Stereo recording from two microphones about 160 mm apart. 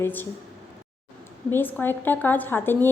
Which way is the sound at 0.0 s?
10° left (ahead or behind).